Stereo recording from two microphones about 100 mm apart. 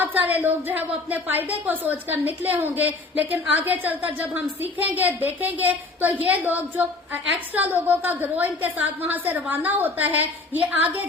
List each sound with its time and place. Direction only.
0.0 s a woman's voice: 15° right (ahead or behind)